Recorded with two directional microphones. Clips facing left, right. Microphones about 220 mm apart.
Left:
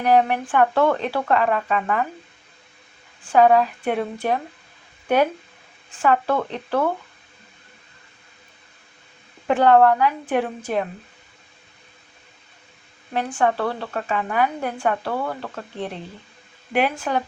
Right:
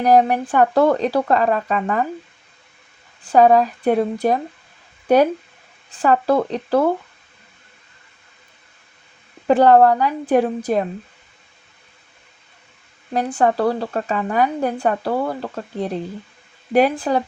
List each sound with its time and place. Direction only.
0.0 s speech: 40° right (ahead or behind)
3.2 s speech: 40° right (ahead or behind)
9.5 s speech: 35° right (ahead or behind)
13.1 s speech: 35° right (ahead or behind)